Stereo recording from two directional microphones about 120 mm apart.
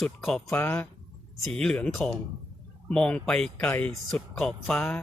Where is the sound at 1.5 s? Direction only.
5° left (ahead or behind).